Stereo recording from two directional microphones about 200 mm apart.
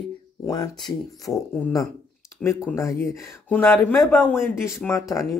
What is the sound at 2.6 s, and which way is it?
Speech, 10° left (ahead or behind).